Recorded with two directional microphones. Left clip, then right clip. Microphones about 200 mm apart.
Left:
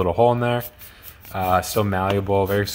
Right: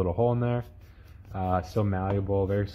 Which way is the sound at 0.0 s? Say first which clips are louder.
Left 9 dB; 20° left (ahead or behind).